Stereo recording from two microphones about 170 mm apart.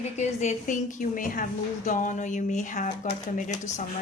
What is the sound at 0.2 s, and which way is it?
A woman's voice, 45° left (ahead or behind).